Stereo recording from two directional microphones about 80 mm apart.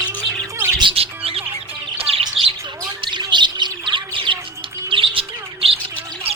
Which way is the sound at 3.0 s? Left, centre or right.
Right.